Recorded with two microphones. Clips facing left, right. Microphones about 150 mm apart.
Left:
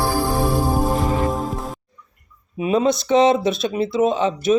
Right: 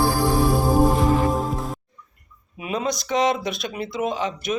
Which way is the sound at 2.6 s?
30° left (ahead or behind).